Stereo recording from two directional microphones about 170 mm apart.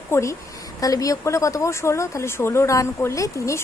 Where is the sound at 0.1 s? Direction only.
15° left (ahead or behind).